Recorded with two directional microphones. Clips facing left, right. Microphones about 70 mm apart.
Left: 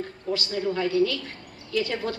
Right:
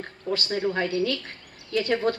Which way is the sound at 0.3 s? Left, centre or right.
Right.